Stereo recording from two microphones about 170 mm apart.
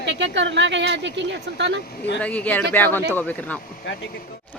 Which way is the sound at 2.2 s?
10° left (ahead or behind).